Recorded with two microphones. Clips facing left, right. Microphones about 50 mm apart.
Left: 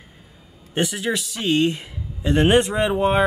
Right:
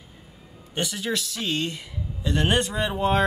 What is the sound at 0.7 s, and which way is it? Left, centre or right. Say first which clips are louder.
Speech: left 5 dB; left.